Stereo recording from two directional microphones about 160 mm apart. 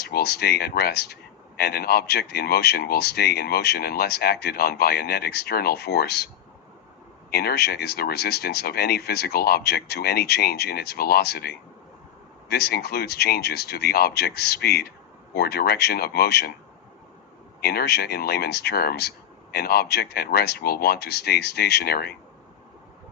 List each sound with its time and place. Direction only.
0.0 s speech: 85° left
17.6 s speech: 85° left